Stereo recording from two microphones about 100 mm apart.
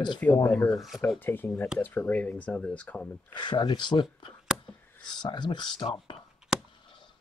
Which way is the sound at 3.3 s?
50° left (ahead or behind).